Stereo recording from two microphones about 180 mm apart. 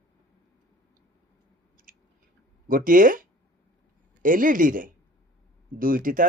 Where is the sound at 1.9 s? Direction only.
50° right (ahead or behind).